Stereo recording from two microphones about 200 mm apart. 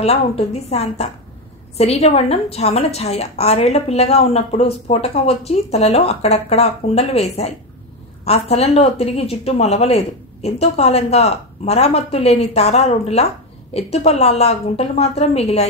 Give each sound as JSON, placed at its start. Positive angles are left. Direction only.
{"t": 0.0, "sound": "a woman's voice", "side_deg": 30}